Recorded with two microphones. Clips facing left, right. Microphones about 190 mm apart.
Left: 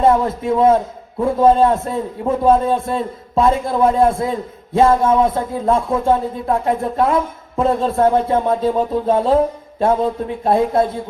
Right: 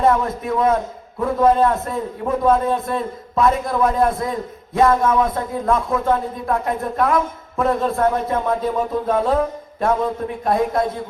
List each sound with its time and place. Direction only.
0.0 s a man's voice: 25° left (ahead or behind)